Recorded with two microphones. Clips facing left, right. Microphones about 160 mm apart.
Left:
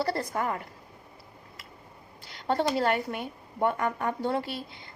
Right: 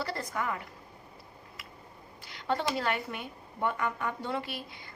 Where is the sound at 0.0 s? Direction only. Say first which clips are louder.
Left 5 dB; 40° left (ahead or behind).